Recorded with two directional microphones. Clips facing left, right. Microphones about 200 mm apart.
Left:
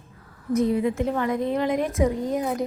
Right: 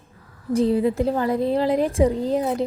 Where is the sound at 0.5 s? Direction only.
30° right (ahead or behind).